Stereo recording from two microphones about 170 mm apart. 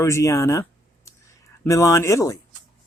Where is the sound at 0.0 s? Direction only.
15° left (ahead or behind).